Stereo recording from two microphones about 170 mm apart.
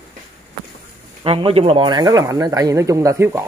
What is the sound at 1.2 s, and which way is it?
Speech, 30° right (ahead or behind).